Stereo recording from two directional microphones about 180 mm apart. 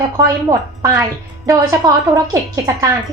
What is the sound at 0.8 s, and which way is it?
A woman's voice, 15° right (ahead or behind).